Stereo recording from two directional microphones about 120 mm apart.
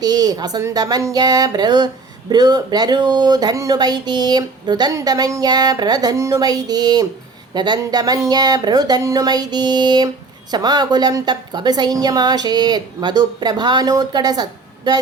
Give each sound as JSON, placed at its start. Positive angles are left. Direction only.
{"t": 0.0, "sound": "speech", "side_deg": -35}